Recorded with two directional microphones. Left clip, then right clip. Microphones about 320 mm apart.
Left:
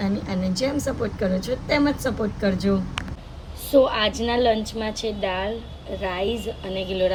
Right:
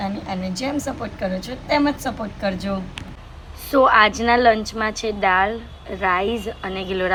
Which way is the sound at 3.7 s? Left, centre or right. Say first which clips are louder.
Right 5 dB; centre.